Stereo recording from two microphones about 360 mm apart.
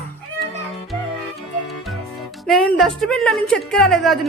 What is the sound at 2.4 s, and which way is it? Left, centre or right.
A woman's voice, centre.